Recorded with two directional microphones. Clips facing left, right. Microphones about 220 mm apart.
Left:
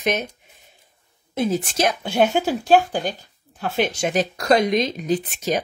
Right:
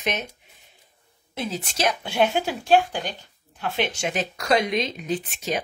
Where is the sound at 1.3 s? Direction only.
50° left (ahead or behind).